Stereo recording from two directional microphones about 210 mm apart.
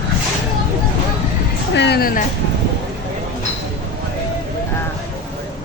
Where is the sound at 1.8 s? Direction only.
50° left (ahead or behind).